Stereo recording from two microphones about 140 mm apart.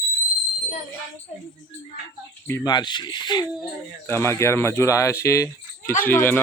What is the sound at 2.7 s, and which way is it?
Speech, 30° left (ahead or behind).